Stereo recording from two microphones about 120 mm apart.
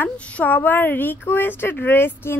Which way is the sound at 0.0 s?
15° left (ahead or behind).